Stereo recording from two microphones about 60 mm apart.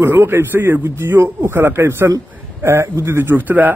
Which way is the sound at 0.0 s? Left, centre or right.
Right.